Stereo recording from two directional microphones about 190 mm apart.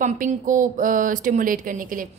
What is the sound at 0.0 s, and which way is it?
Speech, 40° right (ahead or behind).